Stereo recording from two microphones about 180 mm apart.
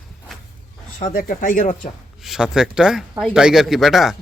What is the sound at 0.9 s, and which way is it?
Speech, 45° left (ahead or behind).